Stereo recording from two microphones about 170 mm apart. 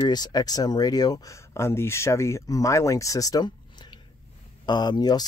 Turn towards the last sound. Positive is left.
turn(degrees=25)  # may be behind; listen again after turning